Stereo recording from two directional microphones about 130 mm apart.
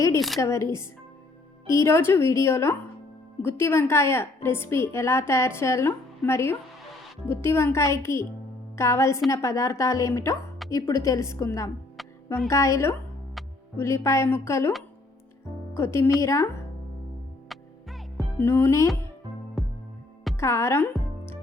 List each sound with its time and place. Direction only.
0.3 s a woman's voice: 20° left (ahead or behind)
12.0 s music: centre (ahead or behind)
12.5 s a woman's voice: 20° left (ahead or behind)
13.4 s music: centre (ahead or behind)
13.7 s a woman's voice: 20° left (ahead or behind)
15.7 s a woman's voice: 20° left (ahead or behind)
17.5 s music: centre (ahead or behind)
18.3 s a woman's voice: 20° left (ahead or behind)
19.6 s music: centre (ahead or behind)
20.3 s a woman's voice: 20° left (ahead or behind)